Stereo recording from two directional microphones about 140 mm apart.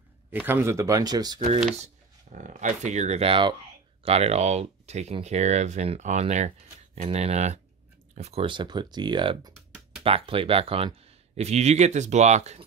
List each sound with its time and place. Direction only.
0.3 s speech: 15° right (ahead or behind)
2.3 s speech: 60° right (ahead or behind)